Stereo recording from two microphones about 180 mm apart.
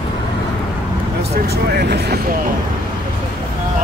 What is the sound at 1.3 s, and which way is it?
Speech, 60° right (ahead or behind).